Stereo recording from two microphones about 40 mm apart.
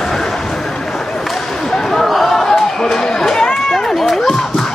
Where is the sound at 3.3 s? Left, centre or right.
Centre.